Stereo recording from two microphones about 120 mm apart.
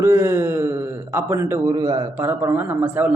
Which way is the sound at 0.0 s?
20° right (ahead or behind).